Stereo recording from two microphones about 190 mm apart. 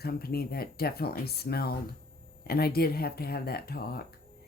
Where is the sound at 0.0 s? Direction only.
55° left (ahead or behind).